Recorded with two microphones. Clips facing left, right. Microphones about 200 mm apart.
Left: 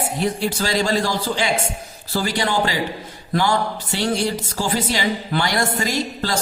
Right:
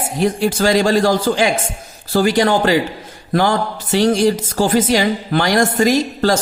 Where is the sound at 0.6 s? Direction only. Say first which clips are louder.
Right 8 dB; 50° right (ahead or behind).